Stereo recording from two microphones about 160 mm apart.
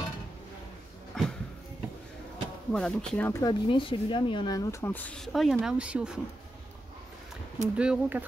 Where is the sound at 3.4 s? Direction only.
30° left (ahead or behind).